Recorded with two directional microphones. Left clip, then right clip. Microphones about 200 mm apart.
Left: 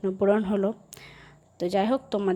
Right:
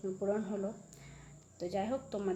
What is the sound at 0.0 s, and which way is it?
Speech, 40° left (ahead or behind).